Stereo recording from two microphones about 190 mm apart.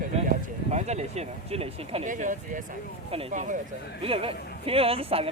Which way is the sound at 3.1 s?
30° right (ahead or behind).